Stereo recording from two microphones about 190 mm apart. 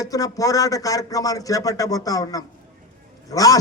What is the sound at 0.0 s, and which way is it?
A man's voice, 20° left (ahead or behind).